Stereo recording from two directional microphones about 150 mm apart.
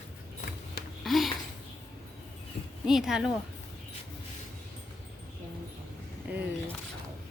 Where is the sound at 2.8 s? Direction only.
5° right (ahead or behind).